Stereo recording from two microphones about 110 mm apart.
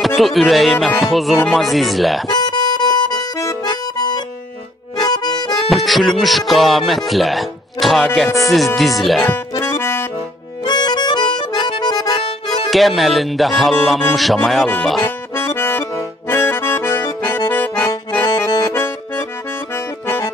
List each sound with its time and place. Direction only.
0.0 s speech: centre (ahead or behind)
2.2 s music: 40° left (ahead or behind)
3.6 s accordion: 40° left (ahead or behind)
5.7 s speech: centre (ahead or behind)
9.3 s music: 20° left (ahead or behind)
10.6 s accordion: 40° left (ahead or behind)
12.6 s speech: centre (ahead or behind)
15.0 s accordion: 25° left (ahead or behind)